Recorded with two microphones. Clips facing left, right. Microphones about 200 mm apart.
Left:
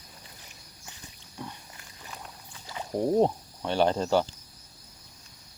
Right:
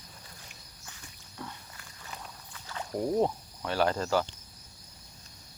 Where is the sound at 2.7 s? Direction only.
20° left (ahead or behind).